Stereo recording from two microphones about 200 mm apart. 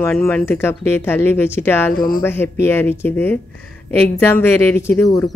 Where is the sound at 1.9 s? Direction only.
45° left (ahead or behind).